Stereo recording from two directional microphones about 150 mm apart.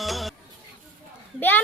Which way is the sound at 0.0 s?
Centre (ahead or behind).